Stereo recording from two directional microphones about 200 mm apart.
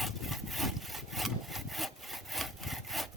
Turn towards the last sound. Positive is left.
turn(degrees=0)  # may be behind; listen again after turning